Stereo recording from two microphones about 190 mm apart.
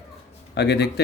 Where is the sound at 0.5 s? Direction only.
60° left (ahead or behind).